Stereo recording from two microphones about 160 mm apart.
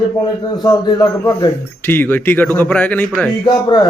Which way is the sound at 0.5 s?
25° left (ahead or behind).